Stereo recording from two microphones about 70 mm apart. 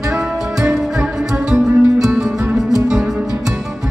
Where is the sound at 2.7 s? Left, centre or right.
Centre.